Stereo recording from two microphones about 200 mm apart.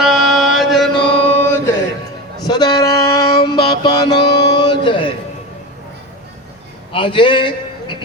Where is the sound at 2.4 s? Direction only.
20° left (ahead or behind).